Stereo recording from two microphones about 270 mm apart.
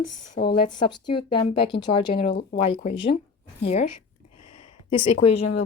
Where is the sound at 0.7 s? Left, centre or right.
Centre.